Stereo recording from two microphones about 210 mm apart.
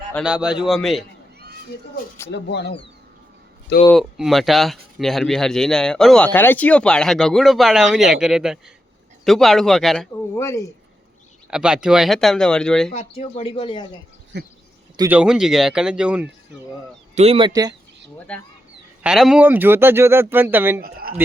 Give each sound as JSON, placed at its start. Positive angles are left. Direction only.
{"t": 0.1, "sound": "speech", "side_deg": 0}
{"t": 2.3, "sound": "speech", "side_deg": 55}
{"t": 3.8, "sound": "speech", "side_deg": 0}
{"t": 10.3, "sound": "speech", "side_deg": 15}
{"t": 11.5, "sound": "speech", "side_deg": -5}
{"t": 12.9, "sound": "speech", "side_deg": 30}
{"t": 14.3, "sound": "a sound", "side_deg": -55}
{"t": 14.9, "sound": "speech", "side_deg": -15}
{"t": 15.2, "sound": "speech", "side_deg": -5}
{"t": 17.2, "sound": "speech", "side_deg": -25}
{"t": 18.3, "sound": "speech", "side_deg": 5}